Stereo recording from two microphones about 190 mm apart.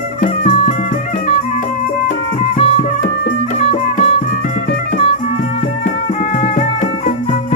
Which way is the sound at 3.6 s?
30° left (ahead or behind).